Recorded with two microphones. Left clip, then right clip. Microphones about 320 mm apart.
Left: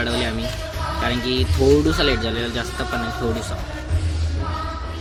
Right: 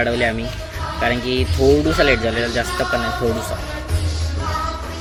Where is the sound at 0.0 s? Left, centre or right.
Centre.